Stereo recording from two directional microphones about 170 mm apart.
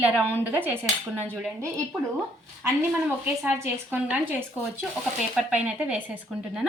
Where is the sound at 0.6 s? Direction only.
10° right (ahead or behind).